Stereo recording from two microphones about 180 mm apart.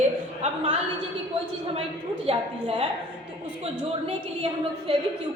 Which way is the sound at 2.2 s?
30° right (ahead or behind).